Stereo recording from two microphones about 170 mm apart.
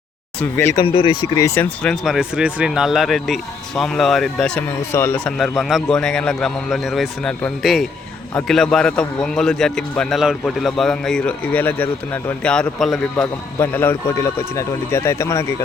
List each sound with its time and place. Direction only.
0.3 s speech: 15° left (ahead or behind)
0.9 s speech: 30° left (ahead or behind)
1.8 s a man's voice: centre (ahead or behind)
5.4 s a man's voice: centre (ahead or behind)
13.6 s speech: 15° left (ahead or behind)